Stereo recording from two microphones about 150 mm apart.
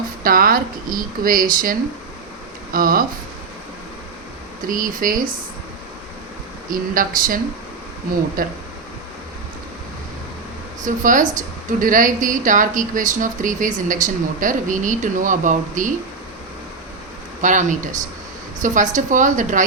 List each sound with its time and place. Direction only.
0.2 s speech: 70° right (ahead or behind)
2.7 s speech: 70° right (ahead or behind)
4.7 s speech: 65° right (ahead or behind)
6.7 s speech: 70° right (ahead or behind)
8.4 s speech: 70° right (ahead or behind)
10.8 s a woman's voice: 60° right (ahead or behind)
17.4 s a woman's voice: 55° right (ahead or behind)